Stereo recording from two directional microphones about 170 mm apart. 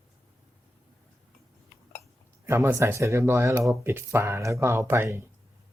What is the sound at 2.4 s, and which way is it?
Speech, 15° right (ahead or behind).